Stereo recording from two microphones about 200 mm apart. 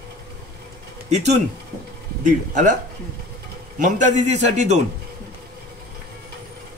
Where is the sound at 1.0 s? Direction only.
35° right (ahead or behind).